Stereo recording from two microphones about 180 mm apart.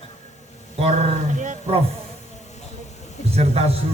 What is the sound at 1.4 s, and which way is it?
Roaring cats, 40° right (ahead or behind).